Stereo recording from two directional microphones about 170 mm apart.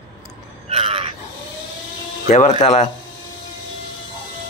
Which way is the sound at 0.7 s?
35° right (ahead or behind).